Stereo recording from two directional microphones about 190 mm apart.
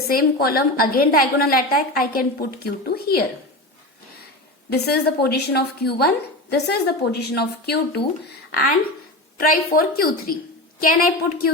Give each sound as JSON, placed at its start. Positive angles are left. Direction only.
{"t": 0.1, "sound": "a woman's voice", "side_deg": 50}
{"t": 4.7, "sound": "speech", "side_deg": 55}
{"t": 9.4, "sound": "a woman's voice", "side_deg": 50}